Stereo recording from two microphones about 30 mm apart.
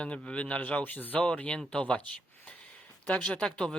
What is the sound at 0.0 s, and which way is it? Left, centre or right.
Speech, left.